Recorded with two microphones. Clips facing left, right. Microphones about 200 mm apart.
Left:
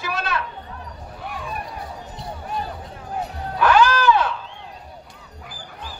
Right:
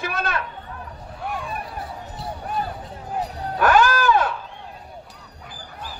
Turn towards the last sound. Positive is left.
turn(degrees=-50)  # may be behind; listen again after turning